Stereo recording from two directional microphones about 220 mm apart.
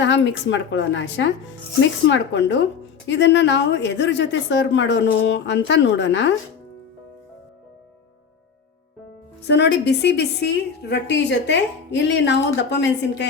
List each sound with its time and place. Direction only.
0.0 s speech: 55° left (ahead or behind)
9.5 s a woman's voice: 50° left (ahead or behind)